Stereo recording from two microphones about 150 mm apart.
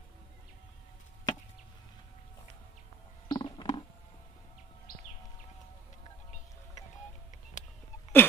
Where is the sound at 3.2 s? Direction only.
30° left (ahead or behind).